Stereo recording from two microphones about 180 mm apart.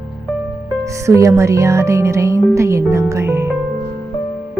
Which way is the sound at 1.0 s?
15° right (ahead or behind).